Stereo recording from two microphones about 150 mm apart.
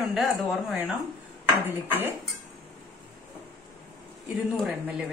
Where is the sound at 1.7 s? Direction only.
15° right (ahead or behind).